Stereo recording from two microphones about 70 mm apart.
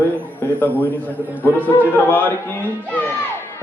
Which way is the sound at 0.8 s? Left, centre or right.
Left.